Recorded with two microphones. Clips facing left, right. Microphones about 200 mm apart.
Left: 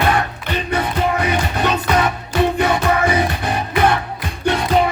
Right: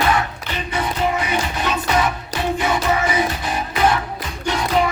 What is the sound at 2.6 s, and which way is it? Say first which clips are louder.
Music: left 3 dB; 60° left (ahead or behind).